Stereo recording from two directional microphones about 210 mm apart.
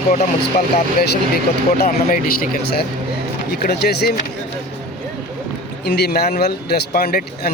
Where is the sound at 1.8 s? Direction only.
40° left (ahead or behind).